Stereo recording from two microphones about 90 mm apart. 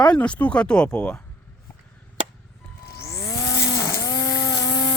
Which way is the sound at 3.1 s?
40° left (ahead or behind).